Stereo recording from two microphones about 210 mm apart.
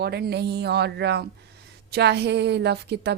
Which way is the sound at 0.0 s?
50° right (ahead or behind).